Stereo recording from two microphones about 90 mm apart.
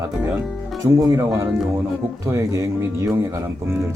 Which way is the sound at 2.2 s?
35° right (ahead or behind).